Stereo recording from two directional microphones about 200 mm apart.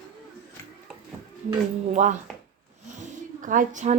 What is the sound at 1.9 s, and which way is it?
Speech, 40° right (ahead or behind).